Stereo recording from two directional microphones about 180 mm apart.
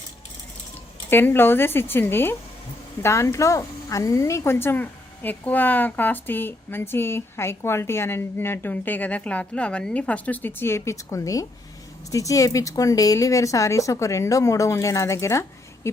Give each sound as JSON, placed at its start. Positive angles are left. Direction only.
{"t": 1.1, "sound": "speech", "side_deg": 10}